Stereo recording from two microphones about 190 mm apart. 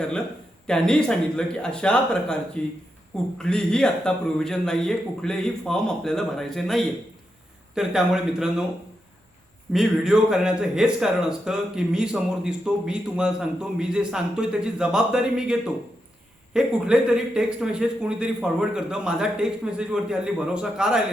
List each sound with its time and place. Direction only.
0.7 s speech: 5° left (ahead or behind)
9.7 s speech: centre (ahead or behind)